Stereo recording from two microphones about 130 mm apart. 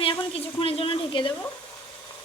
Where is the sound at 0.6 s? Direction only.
45° left (ahead or behind).